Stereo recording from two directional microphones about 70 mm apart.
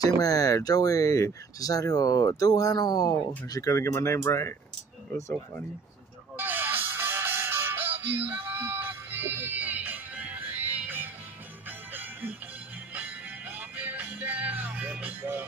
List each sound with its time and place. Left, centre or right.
0.0 s speech: left
6.3 s music: right